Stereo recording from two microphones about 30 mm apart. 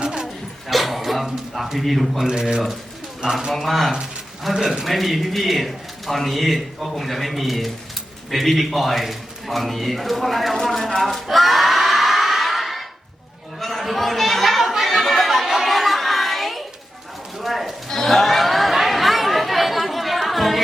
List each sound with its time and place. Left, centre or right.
0.7 s speech: centre
2.2 s speech: right
3.5 s a man's voice: centre
11.0 s a sound: centre
13.6 s chatter: centre
17.4 s livestock: centre
17.8 s chatter: centre